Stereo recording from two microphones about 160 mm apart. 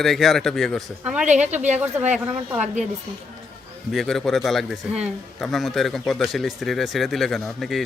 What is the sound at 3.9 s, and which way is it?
Speech, centre (ahead or behind).